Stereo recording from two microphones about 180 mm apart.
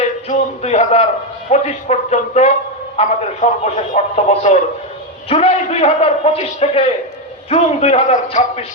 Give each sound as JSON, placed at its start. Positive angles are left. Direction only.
{"t": 0.3, "sound": "a man's voice", "side_deg": 40}